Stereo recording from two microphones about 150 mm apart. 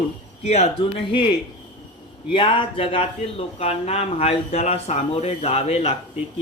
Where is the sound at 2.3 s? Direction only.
35° left (ahead or behind).